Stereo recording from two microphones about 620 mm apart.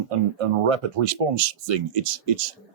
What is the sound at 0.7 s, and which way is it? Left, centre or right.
Speech, right.